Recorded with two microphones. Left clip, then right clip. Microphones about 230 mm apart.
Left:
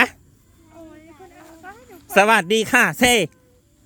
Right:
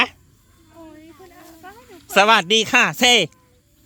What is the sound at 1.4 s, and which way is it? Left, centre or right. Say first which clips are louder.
Cat: left 2 dB; right.